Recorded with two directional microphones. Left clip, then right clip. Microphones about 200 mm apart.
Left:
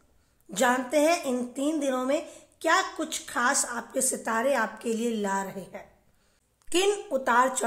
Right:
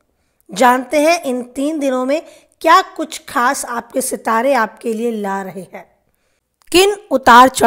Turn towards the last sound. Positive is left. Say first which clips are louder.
# right 16 dB
turn(degrees=-45)  # may be behind; listen again after turning